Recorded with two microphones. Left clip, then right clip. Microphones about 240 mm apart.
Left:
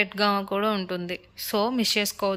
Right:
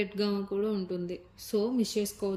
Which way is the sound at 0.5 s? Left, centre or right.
Left.